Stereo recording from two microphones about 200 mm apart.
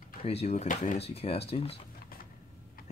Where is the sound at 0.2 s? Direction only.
30° left (ahead or behind).